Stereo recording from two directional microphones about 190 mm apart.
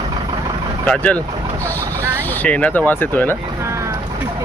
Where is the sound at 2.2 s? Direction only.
10° left (ahead or behind).